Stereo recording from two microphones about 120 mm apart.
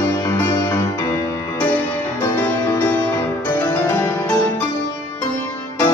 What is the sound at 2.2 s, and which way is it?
Music, 20° left (ahead or behind).